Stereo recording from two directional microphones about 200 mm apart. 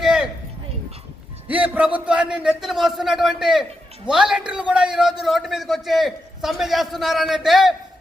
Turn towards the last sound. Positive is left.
turn(degrees=0)  # may be behind; listen again after turning